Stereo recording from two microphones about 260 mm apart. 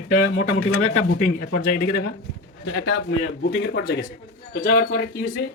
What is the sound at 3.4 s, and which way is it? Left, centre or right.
Speech, left.